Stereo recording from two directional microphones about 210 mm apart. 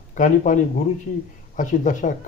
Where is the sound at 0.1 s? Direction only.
35° left (ahead or behind).